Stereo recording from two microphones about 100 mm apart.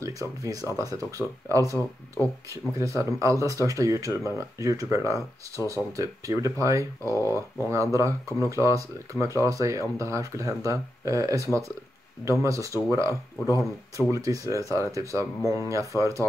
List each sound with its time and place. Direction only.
0.0 s speech: 35° right (ahead or behind)